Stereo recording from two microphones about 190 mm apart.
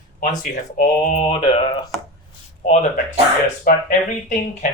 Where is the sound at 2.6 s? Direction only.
40° left (ahead or behind).